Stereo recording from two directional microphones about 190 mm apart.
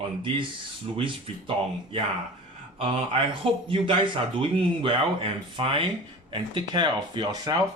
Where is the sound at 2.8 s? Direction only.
25° right (ahead or behind).